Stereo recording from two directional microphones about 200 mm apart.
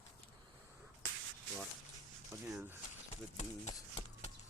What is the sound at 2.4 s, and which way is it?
Speech, 5° right (ahead or behind).